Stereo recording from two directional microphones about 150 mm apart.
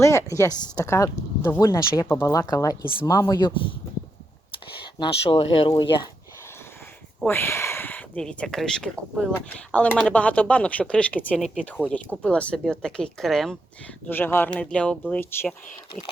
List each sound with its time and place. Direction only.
0.0 s speech: 20° left (ahead or behind)
4.8 s speech: 35° left (ahead or behind)
7.3 s speech: 15° left (ahead or behind)